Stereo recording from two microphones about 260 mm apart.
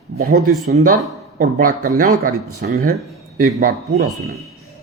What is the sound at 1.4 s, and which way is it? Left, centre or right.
Speech, right.